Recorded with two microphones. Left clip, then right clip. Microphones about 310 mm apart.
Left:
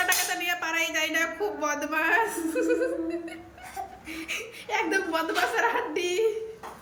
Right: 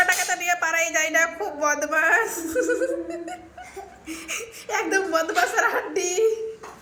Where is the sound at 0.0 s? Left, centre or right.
Centre.